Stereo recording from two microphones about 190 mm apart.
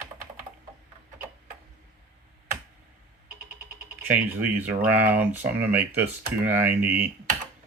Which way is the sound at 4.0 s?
10° right (ahead or behind).